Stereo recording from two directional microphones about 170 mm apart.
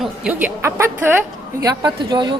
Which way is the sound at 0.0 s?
5° right (ahead or behind).